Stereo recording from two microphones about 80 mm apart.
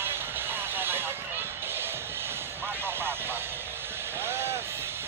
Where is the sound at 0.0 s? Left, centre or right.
Right.